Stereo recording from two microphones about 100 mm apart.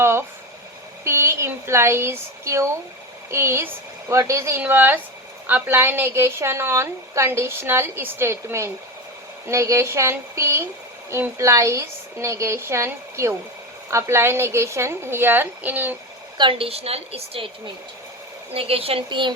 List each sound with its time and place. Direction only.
0.0 s a woman's voice: 25° right (ahead or behind)
16.4 s a woman's voice: 60° right (ahead or behind)
18.5 s a woman's voice: 75° right (ahead or behind); by 19.3 s 55° right (ahead or behind)